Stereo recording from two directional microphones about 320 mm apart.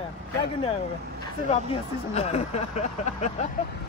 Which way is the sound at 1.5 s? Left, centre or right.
Centre.